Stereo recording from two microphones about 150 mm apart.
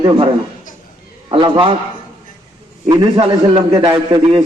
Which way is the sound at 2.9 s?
35° right (ahead or behind).